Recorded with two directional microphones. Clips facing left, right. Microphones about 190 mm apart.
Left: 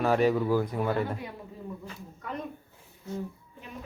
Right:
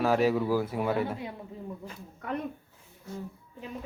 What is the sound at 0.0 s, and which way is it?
Speech, centre (ahead or behind).